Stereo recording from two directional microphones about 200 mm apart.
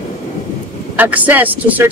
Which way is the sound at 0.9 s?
10° right (ahead or behind).